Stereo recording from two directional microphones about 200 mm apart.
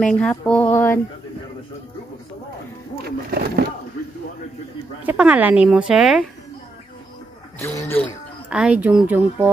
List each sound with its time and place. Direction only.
0.0 s a sound: 5° left (ahead or behind)
3.3 s speech: 50° right (ahead or behind)
5.0 s speech: 5° right (ahead or behind)
7.5 s speech: 10° left (ahead or behind)
7.9 s a sound: 10° left (ahead or behind)
8.5 s speech: 5° right (ahead or behind)